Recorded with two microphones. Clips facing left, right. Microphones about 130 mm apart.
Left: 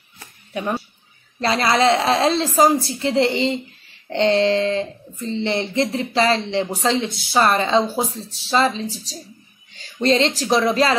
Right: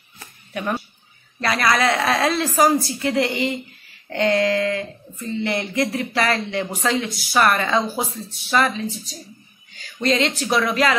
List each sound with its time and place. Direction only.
0.5 s speech: 20° left (ahead or behind)
9.8 s a sound: 30° left (ahead or behind)
10.4 s speech: 30° left (ahead or behind)